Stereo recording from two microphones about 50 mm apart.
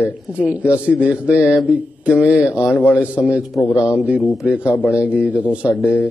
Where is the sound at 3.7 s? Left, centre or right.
Left.